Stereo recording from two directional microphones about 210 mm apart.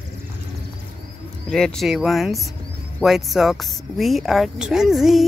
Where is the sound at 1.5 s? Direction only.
5° left (ahead or behind).